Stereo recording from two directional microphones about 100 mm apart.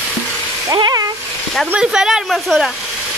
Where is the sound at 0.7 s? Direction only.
40° right (ahead or behind).